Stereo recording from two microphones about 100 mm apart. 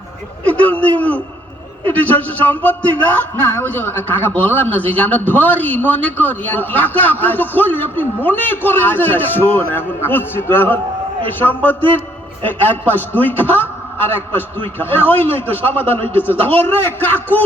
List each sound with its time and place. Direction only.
0.4 s a man's voice: 15° left (ahead or behind)